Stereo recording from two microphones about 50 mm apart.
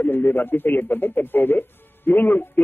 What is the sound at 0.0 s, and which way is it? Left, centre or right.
Speech, left.